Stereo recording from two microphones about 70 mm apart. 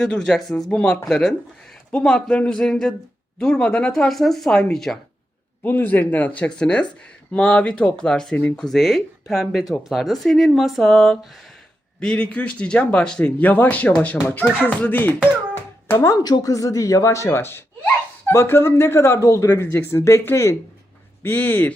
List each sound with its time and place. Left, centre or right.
0.0 s a man's voice: centre
0.7 s a man's voice: centre
5.6 s a man's voice: left
8.6 s speech: centre
11.9 s a man's voice: centre
16.0 s speech: left
17.2 s speech: left
19.9 s speech: left
21.2 s speech: left